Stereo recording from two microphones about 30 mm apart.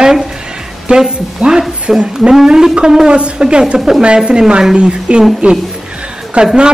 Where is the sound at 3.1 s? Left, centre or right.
Right.